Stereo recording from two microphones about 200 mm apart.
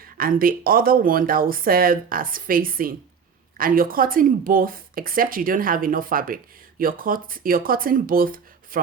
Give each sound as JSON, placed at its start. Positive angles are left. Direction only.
{"t": 0.0, "sound": "a woman's voice", "side_deg": -45}